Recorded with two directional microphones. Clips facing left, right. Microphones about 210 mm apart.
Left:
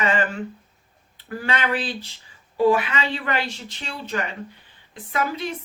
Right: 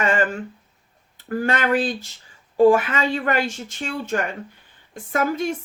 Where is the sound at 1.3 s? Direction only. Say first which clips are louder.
Right 5 dB; 45° right (ahead or behind).